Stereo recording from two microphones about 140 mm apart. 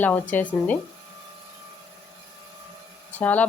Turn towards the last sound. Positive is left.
turn(degrees=10)  # may be behind; listen again after turning